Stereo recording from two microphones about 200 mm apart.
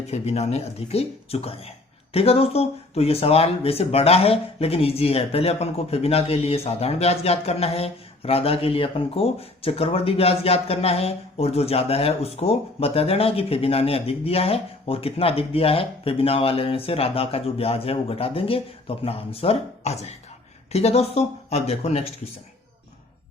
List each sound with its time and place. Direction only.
0.1 s speech: 30° left (ahead or behind)